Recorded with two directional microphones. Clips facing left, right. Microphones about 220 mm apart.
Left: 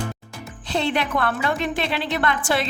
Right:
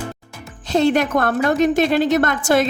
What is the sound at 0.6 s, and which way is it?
A woman's voice, 45° right (ahead or behind).